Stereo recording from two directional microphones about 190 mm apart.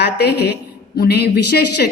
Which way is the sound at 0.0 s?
60° left (ahead or behind).